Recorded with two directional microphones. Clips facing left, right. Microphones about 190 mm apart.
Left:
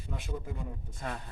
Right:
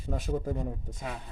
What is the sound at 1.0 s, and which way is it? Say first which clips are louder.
Speech: left 4 dB; 5° right (ahead or behind).